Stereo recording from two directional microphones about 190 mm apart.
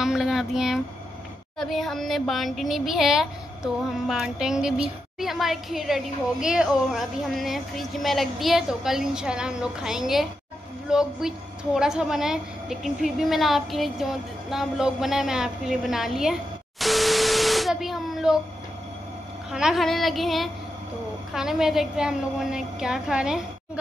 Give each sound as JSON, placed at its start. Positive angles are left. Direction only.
{"t": 0.0, "sound": "a woman's voice", "side_deg": 0}
{"t": 19.5, "sound": "a woman's voice", "side_deg": 0}